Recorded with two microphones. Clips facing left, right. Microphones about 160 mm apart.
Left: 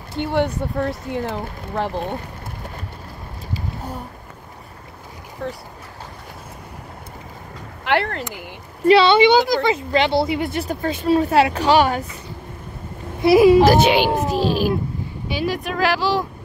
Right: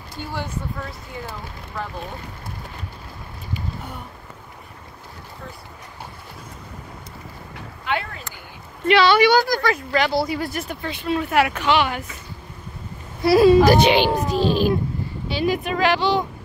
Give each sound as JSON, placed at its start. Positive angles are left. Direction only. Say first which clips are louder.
{"t": 0.2, "sound": "speech", "louder": "left 9 dB", "side_deg": 65}
{"t": 3.5, "sound": "a sound", "louder": "left 2 dB", "side_deg": 35}
{"t": 5.4, "sound": "speech", "louder": "left 11 dB", "side_deg": 70}
{"t": 7.8, "sound": "speech", "louder": "left 6 dB", "side_deg": 75}
{"t": 8.8, "sound": "speech", "louder": "left 3 dB", "side_deg": 30}
{"t": 10.7, "sound": "speech", "louder": "left 9 dB", "side_deg": 45}
{"t": 13.2, "sound": "speech", "louder": "left 2 dB", "side_deg": 15}
{"t": 13.7, "sound": "speech", "louder": "left 1 dB", "side_deg": 5}